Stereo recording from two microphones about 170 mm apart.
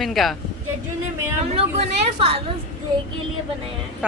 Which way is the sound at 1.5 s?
35° right (ahead or behind).